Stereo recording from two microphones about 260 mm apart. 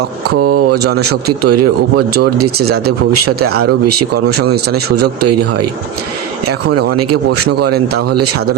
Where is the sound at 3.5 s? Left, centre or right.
Right.